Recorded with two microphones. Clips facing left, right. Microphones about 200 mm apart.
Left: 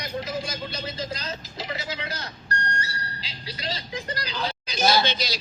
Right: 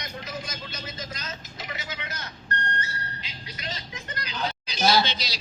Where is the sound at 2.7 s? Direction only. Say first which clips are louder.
Left 1 dB; 35° left (ahead or behind).